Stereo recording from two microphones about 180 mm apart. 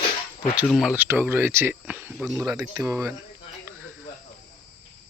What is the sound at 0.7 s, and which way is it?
Speech, centre (ahead or behind).